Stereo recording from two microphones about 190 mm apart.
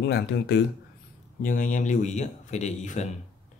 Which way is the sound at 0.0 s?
60° left (ahead or behind).